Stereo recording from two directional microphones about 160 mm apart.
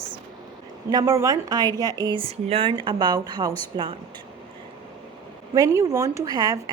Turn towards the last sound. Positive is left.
turn(degrees=-25)  # may be behind; listen again after turning